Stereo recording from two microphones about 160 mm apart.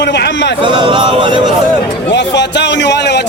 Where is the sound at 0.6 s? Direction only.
30° right (ahead or behind).